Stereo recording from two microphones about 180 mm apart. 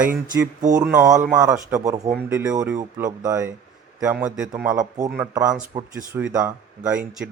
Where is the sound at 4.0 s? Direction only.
5° right (ahead or behind).